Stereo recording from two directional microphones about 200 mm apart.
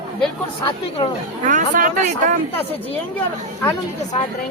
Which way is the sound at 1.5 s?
40° right (ahead or behind).